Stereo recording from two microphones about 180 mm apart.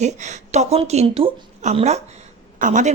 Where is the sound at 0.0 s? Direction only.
40° right (ahead or behind).